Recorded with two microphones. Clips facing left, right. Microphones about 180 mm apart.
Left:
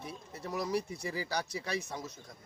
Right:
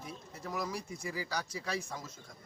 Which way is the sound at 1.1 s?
30° left (ahead or behind).